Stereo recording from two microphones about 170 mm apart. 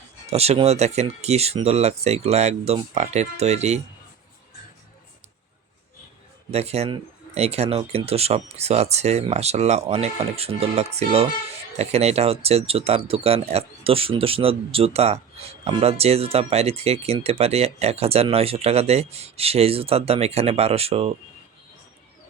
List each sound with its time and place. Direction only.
0.3 s speech: 40° right (ahead or behind)
6.5 s speech: 40° right (ahead or behind)